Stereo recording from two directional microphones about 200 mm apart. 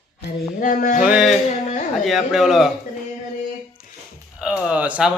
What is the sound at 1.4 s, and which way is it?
Speech, 35° left (ahead or behind).